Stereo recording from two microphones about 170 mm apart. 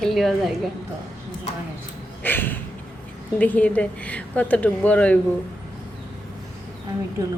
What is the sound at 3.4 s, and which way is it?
A woman's voice, 10° left (ahead or behind).